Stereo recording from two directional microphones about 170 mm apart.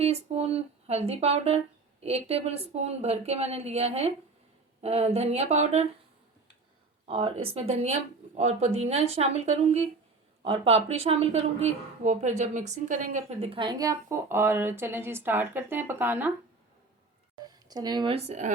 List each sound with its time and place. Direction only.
0.0 s speech: 35° right (ahead or behind)
7.1 s a woman's voice: 35° right (ahead or behind); by 16.3 s 10° right (ahead or behind)
17.4 s speech: 25° right (ahead or behind); by 18.5 s 45° right (ahead or behind)